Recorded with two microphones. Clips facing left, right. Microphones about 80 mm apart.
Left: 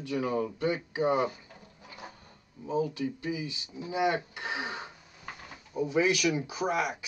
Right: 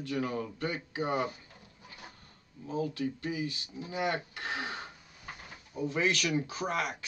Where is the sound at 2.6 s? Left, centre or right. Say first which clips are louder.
Left 3 dB; centre.